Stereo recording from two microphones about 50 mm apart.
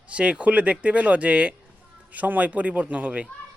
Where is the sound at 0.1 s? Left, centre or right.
Right.